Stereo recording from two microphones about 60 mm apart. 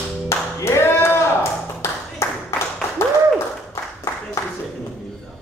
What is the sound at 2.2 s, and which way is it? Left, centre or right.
Clapping, left.